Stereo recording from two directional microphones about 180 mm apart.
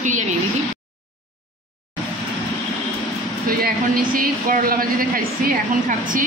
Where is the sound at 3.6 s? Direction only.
50° right (ahead or behind).